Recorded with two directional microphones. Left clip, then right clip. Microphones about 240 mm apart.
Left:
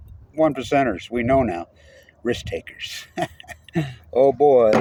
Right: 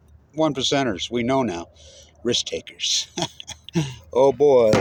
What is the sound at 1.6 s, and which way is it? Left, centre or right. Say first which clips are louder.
Speech: left 2 dB; centre.